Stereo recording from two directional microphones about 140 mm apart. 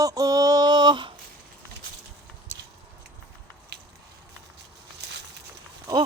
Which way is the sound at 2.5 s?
20° right (ahead or behind).